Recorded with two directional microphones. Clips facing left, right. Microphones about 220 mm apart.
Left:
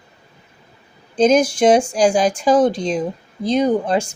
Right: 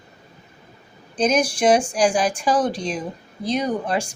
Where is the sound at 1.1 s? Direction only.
90° left.